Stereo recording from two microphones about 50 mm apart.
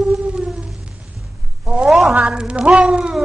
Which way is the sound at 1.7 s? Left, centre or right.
Centre.